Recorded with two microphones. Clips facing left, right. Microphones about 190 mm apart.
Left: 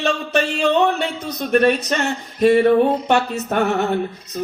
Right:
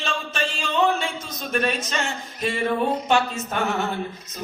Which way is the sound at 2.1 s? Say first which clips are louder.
Left 12 dB; 40° left (ahead or behind).